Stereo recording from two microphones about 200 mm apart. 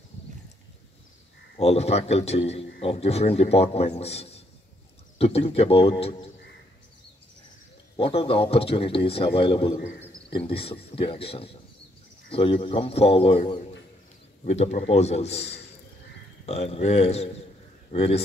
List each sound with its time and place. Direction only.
1.6 s a man's voice: 30° left (ahead or behind)
7.9 s a man's voice: 30° left (ahead or behind)